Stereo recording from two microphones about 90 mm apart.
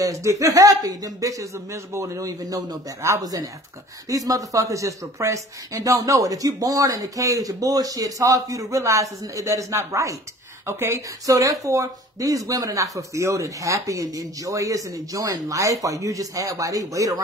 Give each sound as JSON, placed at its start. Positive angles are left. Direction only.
{"t": 0.0, "sound": "speech", "side_deg": -35}